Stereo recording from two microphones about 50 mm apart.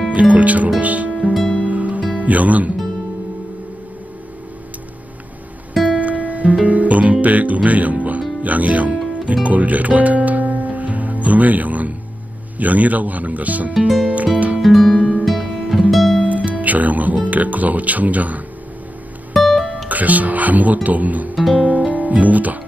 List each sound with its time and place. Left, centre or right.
0.1 s speech: right
1.1 s music: centre
1.7 s music: right
2.2 s speech: right
5.9 s music: right
12.5 s speech: right
13.7 s music: centre
14.0 s speech: right
14.6 s music: centre
16.2 s speech: right
19.3 s music: centre
19.9 s speech: right
21.5 s music: right